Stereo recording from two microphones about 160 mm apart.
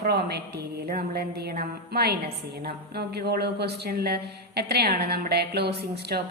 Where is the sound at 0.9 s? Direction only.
60° right (ahead or behind).